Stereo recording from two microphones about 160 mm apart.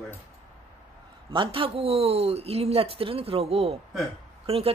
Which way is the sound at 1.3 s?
35° right (ahead or behind).